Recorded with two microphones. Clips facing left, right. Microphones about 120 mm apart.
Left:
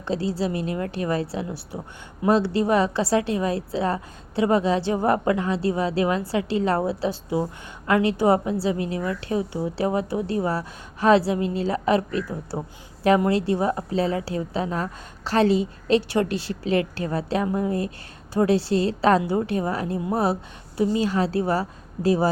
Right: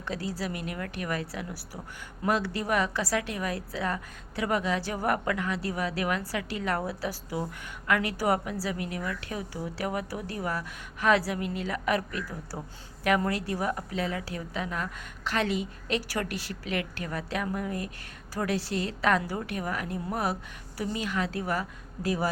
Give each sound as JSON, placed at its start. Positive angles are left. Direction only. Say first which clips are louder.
{"t": 0.0, "sound": "a woman's voice", "louder": "left 8 dB", "side_deg": 30}